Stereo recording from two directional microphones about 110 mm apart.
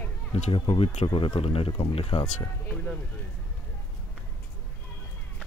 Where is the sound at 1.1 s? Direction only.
40° left (ahead or behind).